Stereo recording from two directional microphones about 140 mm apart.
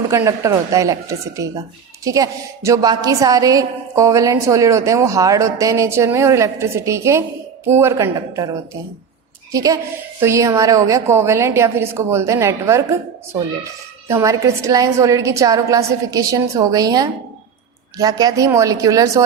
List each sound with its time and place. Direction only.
0.1 s a woman's voice: 20° right (ahead or behind)
9.5 s a woman's voice: 25° right (ahead or behind)
14.1 s a woman's voice: 20° right (ahead or behind)